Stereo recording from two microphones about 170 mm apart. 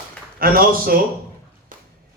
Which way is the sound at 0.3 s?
60° right (ahead or behind).